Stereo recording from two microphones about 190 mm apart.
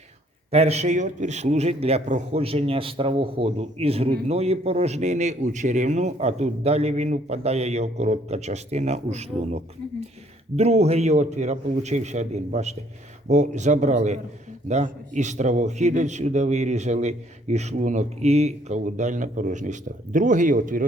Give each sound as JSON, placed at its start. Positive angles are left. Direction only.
{"t": 0.5, "sound": "a man's voice", "side_deg": -35}
{"t": 10.6, "sound": "a man's voice", "side_deg": -35}